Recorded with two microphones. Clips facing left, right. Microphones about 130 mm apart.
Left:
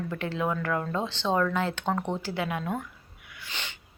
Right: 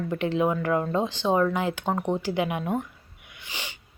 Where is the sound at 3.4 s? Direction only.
15° right (ahead or behind).